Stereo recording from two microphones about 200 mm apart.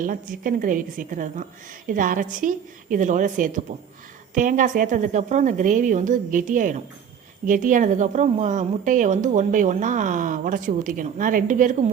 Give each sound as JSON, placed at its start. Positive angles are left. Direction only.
{"t": 0.0, "sound": "a woman's voice", "side_deg": -45}